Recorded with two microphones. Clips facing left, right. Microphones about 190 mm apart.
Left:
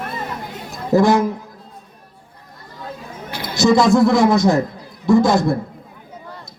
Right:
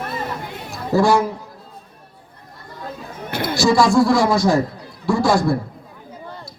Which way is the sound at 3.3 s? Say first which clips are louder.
Right 7 dB; 55° right (ahead or behind).